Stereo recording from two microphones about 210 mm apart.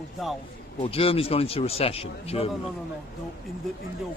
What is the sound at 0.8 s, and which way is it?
A man's voice, 30° left (ahead or behind).